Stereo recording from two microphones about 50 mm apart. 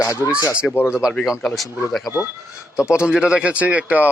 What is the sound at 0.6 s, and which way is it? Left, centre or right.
Speech, centre.